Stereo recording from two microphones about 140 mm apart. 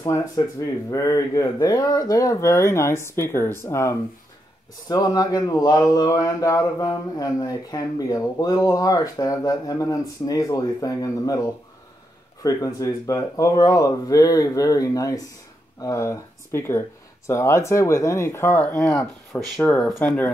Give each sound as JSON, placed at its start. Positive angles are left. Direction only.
{"t": 0.1, "sound": "speech", "side_deg": 20}